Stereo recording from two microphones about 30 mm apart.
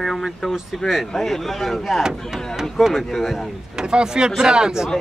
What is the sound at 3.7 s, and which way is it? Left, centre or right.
Speech, right.